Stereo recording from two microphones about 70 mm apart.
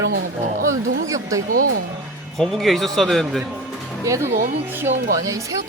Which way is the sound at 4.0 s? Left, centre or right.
Right.